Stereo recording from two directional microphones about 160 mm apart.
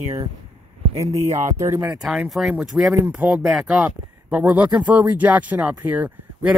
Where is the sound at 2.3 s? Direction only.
5° right (ahead or behind).